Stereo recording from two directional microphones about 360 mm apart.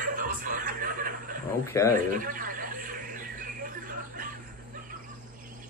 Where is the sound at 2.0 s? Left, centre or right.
Right.